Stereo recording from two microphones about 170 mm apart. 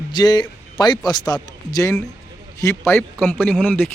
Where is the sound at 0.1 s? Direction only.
25° left (ahead or behind).